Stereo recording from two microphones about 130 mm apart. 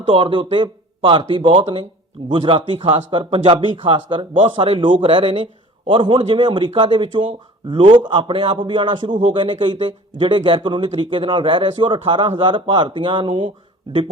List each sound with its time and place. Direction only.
0.1 s speech: 40° right (ahead or behind)